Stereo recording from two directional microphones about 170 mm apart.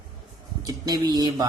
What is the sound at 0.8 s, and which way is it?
Speech, 20° right (ahead or behind).